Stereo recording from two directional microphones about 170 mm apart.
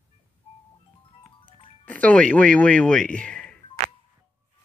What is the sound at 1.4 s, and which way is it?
Music, 30° left (ahead or behind).